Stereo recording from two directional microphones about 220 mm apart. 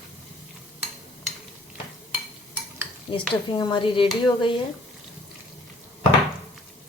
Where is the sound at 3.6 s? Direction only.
20° left (ahead or behind).